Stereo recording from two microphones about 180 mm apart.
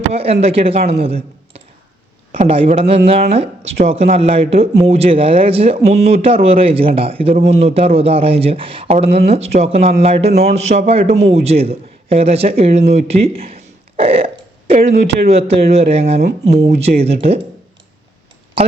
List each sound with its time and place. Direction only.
0.1 s a man's voice: 35° right (ahead or behind)